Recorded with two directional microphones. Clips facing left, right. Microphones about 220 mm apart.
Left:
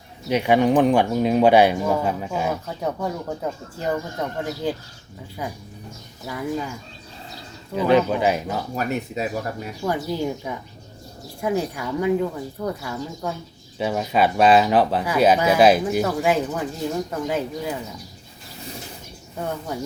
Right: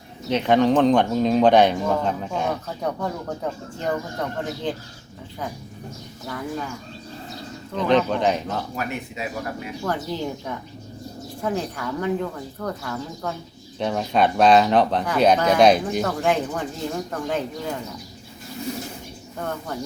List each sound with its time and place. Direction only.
0.3 s speech: 10° left (ahead or behind)
6.2 s speech: 10° left (ahead or behind)
7.7 s speech: 5° left (ahead or behind)
8.7 s speech: 40° left (ahead or behind)
9.8 s speech: 10° left (ahead or behind)
19.4 s speech: 10° left (ahead or behind)